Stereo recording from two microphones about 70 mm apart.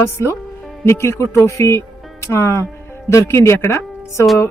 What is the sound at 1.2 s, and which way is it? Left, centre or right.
A woman's voice, left.